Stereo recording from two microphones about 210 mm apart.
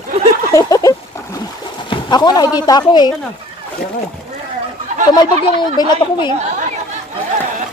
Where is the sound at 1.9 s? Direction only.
20° left (ahead or behind).